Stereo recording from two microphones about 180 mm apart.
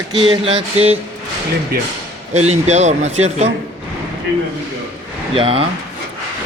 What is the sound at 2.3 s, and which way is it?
Speech, 40° right (ahead or behind).